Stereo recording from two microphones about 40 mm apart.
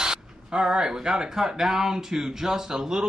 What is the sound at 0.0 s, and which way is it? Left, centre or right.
Speech, centre.